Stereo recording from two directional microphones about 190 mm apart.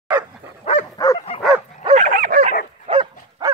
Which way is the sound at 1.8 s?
35° right (ahead or behind).